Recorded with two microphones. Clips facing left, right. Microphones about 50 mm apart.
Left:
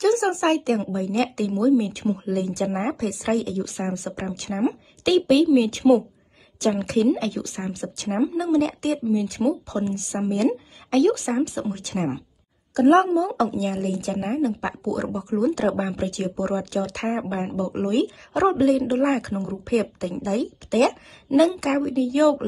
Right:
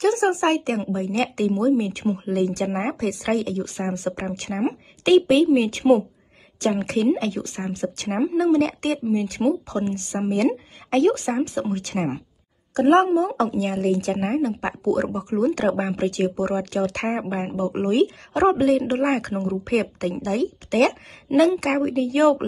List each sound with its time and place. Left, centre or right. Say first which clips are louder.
0.0 s a woman's voice: right 1 dB; right
8.1 s a woman's voice: right 2 dB; right
13.7 s a woman's voice: right 4 dB; right